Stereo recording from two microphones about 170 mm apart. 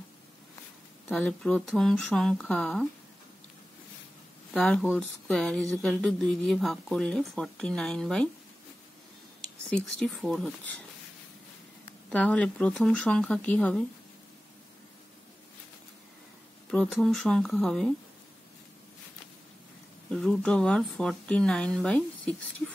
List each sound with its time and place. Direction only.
1.2 s speech: 5° left (ahead or behind)
4.6 s speech: 5° left (ahead or behind)
9.7 s speech: 5° left (ahead or behind)
12.1 s speech: 5° left (ahead or behind)
16.7 s speech: 5° left (ahead or behind)
20.1 s speech: 5° left (ahead or behind)